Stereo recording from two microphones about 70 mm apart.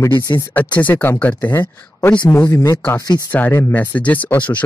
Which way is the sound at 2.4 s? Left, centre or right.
Left.